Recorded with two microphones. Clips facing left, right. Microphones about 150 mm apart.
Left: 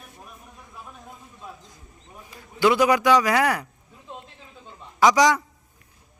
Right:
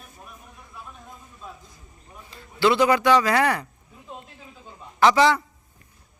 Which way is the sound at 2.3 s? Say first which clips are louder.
Even; 15° left (ahead or behind).